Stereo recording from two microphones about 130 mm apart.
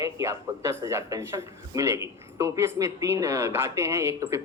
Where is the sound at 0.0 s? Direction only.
25° right (ahead or behind).